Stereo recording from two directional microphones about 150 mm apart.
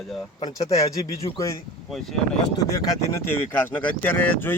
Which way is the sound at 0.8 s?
20° left (ahead or behind).